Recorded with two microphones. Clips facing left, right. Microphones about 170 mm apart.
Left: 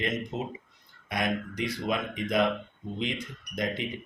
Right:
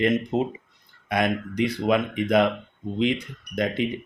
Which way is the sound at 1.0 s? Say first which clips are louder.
Right 6 dB; 60° right (ahead or behind).